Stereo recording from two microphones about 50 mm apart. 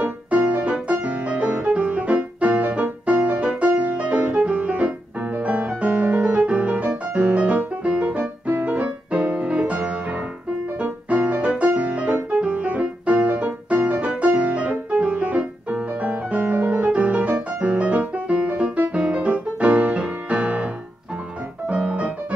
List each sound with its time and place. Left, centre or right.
0.0 s music: right